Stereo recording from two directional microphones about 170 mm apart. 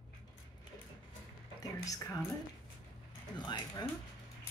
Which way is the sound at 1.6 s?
20° left (ahead or behind).